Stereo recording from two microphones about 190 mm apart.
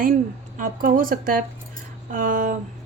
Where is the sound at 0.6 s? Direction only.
45° right (ahead or behind).